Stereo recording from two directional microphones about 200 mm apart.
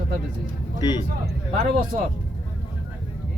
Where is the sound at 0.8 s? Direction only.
20° left (ahead or behind).